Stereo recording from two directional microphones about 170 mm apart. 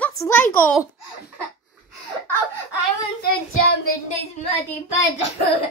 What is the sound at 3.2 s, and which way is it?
Child singing, 65° left (ahead or behind).